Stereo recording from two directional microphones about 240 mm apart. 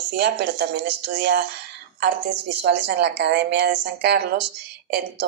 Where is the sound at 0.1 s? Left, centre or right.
Right.